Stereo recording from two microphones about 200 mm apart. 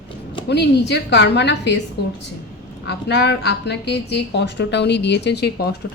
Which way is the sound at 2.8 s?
60° left (ahead or behind).